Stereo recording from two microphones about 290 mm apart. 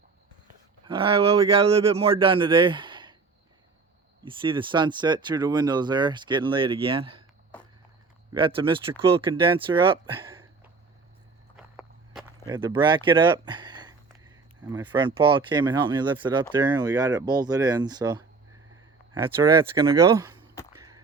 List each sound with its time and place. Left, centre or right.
0.9 s speech: centre
4.2 s speech: centre
8.3 s speech: centre
11.5 s walk: centre
12.5 s speech: centre
20.7 s a sound: centre